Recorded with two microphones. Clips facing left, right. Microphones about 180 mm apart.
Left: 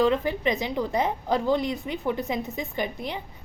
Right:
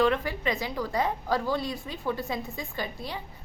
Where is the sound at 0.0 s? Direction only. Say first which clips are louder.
Left 3 dB; 20° left (ahead or behind).